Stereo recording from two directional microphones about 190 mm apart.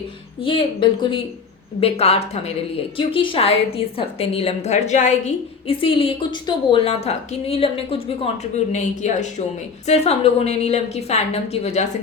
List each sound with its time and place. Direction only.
0.4 s a woman's voice: 25° left (ahead or behind)